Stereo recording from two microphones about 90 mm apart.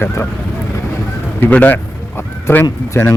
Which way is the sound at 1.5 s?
15° left (ahead or behind).